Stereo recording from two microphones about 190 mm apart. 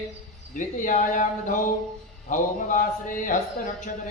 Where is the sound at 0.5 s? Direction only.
45° left (ahead or behind).